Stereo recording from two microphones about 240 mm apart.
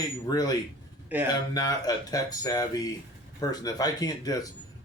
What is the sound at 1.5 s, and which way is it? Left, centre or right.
Speech, centre.